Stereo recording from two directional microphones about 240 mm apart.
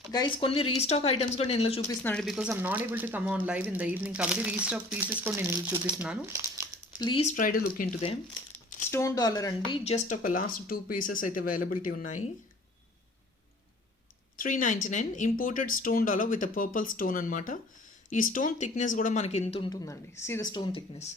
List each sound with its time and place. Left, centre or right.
0.1 s speech: centre
2.0 s speech: centre
7.0 s speech: left
8.9 s a woman's voice: centre
9.8 s speech: left
14.3 s speech: left